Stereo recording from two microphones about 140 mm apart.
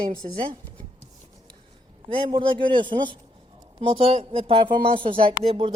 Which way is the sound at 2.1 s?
40° right (ahead or behind).